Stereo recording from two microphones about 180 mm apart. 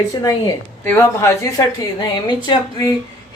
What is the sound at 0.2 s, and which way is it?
A woman's voice, 20° left (ahead or behind).